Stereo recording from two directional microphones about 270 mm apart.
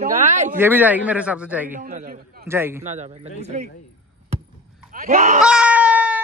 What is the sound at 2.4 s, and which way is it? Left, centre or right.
Speech, centre.